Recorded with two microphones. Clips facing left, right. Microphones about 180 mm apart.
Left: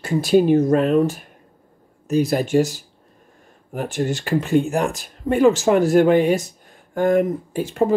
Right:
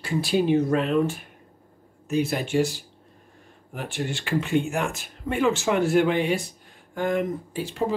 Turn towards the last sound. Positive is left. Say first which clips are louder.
# left 7 dB
turn(degrees=50)  # may be behind; listen again after turning